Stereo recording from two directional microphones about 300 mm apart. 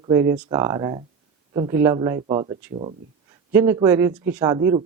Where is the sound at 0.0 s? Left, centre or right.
Centre.